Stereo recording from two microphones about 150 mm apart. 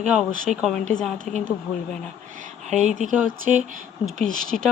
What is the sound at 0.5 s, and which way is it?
Speech, centre (ahead or behind).